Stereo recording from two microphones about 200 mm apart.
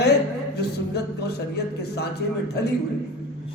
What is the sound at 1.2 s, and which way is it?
Speech, 55° left (ahead or behind).